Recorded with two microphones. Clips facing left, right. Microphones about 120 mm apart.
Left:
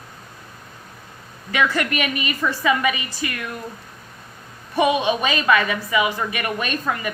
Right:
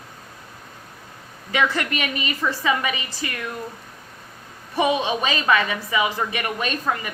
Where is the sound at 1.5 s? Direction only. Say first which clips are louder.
Left 1 dB; 25° right (ahead or behind).